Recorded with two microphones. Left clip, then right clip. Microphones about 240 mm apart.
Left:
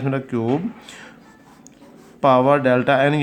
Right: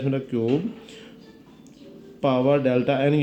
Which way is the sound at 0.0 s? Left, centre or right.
Centre.